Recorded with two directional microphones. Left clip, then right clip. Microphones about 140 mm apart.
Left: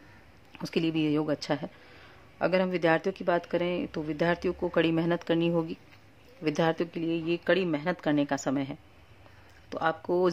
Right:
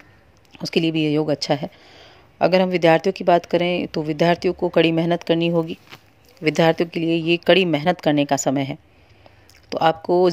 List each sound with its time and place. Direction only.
0.5 s a woman's voice: 25° right (ahead or behind)